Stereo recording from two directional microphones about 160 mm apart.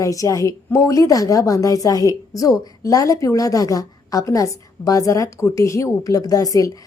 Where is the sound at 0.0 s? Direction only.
20° left (ahead or behind).